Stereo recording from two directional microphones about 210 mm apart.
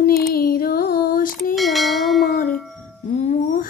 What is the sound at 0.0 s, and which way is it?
Child singing, 45° left (ahead or behind).